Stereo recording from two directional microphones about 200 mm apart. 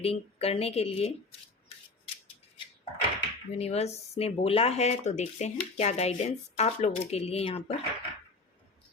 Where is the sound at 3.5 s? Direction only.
30° left (ahead or behind).